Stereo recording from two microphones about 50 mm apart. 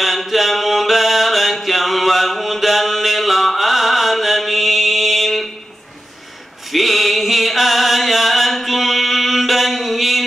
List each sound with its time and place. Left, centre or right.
0.0 s mantra: centre
6.7 s music: centre